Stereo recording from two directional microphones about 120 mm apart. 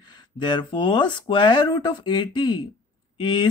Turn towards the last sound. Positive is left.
turn(degrees=40)  # may be behind; listen again after turning